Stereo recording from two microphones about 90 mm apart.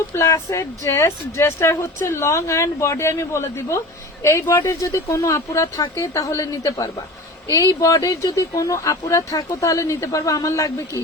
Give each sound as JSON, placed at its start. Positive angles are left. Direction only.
{"t": 0.2, "sound": "speech", "side_deg": 40}